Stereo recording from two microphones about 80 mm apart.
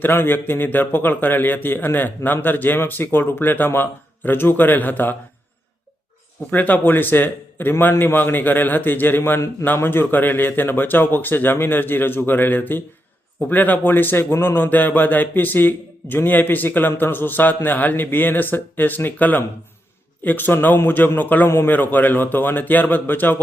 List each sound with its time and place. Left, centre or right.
0.0 s a man's voice: left
6.5 s a man's voice: left